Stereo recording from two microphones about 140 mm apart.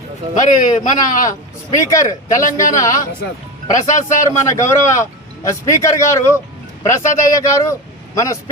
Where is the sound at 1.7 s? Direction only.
20° left (ahead or behind).